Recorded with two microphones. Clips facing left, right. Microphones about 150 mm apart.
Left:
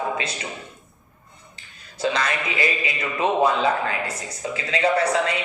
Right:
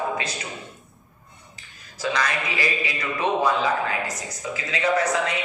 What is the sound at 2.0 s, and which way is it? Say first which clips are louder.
A man's voice: left 2 dB; 25° left (ahead or behind).